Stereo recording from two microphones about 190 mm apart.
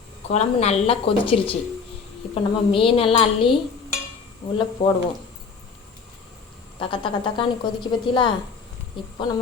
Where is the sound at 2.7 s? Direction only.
30° left (ahead or behind).